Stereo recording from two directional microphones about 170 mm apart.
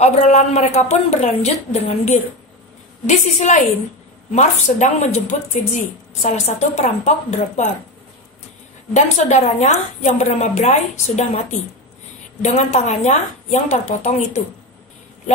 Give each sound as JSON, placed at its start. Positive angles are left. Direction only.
{"t": 0.0, "sound": "a woman's voice", "side_deg": 40}
{"t": 8.9, "sound": "a woman's voice", "side_deg": 45}